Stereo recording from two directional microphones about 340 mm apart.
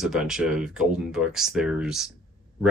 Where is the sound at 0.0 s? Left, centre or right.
Centre.